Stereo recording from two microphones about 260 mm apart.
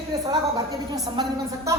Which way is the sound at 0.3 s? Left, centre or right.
Centre.